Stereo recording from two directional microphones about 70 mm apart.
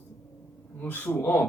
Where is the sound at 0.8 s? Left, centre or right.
Left.